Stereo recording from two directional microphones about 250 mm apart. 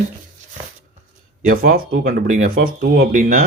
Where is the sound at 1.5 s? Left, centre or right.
Right.